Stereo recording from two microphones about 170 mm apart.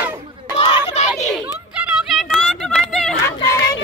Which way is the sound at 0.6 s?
35° left (ahead or behind).